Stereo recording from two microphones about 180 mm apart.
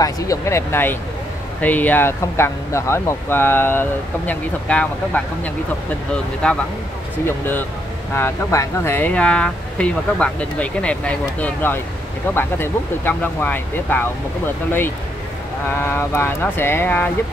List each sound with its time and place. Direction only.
0.0 s speech: 15° left (ahead or behind)
15.8 s speech: 10° left (ahead or behind)